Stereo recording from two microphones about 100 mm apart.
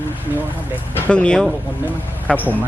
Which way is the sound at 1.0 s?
10° left (ahead or behind).